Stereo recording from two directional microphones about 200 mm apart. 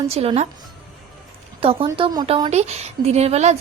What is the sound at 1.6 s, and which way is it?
A woman's voice, 25° right (ahead or behind).